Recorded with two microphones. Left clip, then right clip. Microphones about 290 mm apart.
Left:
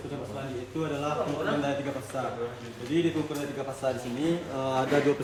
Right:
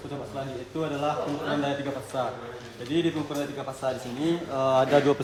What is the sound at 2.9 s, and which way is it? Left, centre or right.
Speech, centre.